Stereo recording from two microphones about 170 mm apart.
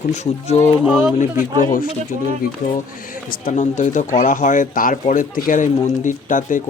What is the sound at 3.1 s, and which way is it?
Speech, 55° left (ahead or behind).